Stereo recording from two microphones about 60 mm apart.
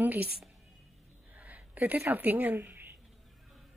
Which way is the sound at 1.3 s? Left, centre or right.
Right.